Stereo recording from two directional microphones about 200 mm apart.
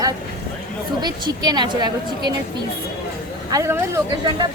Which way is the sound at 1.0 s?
20° right (ahead or behind).